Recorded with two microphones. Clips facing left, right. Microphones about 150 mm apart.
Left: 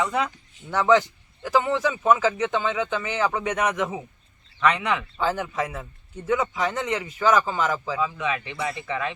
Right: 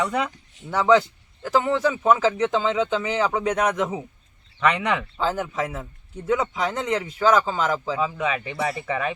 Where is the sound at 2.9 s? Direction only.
15° right (ahead or behind).